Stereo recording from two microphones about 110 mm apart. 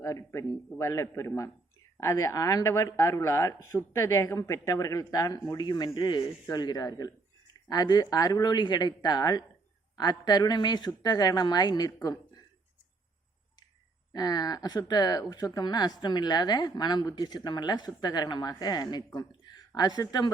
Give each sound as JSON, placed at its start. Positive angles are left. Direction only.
{"t": 0.0, "sound": "speech", "side_deg": 25}
{"t": 14.1, "sound": "speech", "side_deg": 35}